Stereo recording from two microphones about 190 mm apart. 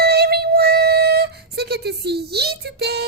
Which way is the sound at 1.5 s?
60° right (ahead or behind).